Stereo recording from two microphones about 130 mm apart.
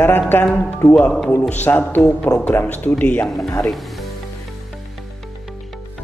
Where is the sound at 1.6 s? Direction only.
15° left (ahead or behind).